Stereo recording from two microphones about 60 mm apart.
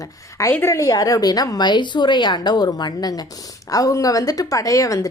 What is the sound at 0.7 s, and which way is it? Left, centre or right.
A woman's voice, left.